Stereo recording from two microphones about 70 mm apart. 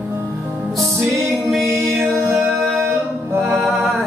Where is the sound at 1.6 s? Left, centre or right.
Right.